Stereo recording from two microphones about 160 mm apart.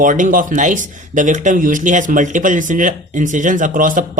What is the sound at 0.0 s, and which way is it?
Speech, 55° right (ahead or behind).